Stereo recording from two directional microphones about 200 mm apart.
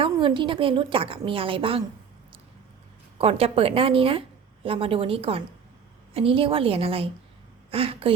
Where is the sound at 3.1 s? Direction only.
30° right (ahead or behind).